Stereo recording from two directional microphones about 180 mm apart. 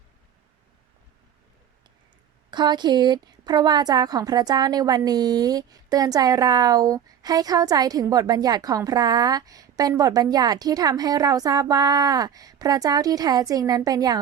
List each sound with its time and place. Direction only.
2.5 s a woman's voice: 25° right (ahead or behind)